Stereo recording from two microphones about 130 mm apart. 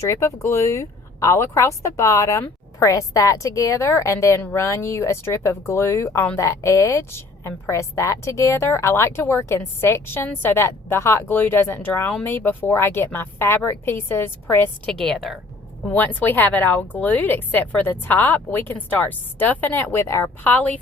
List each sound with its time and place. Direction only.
0.0 s speech: 20° left (ahead or behind)
14.8 s a woman's voice: 5° left (ahead or behind)
15.9 s speech: 15° left (ahead or behind)